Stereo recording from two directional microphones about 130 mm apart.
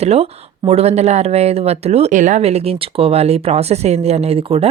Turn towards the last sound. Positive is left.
turn(degrees=-45)  # may be behind; listen again after turning